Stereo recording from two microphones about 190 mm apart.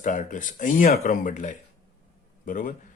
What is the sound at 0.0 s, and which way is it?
A man's voice, 45° left (ahead or behind).